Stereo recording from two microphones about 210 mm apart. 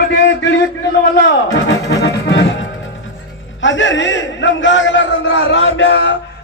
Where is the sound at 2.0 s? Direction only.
50° left (ahead or behind).